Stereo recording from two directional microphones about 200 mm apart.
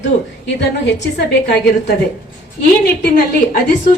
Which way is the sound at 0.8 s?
55° left (ahead or behind).